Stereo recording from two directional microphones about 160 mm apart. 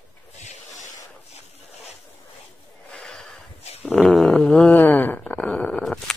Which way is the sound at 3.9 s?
5° left (ahead or behind).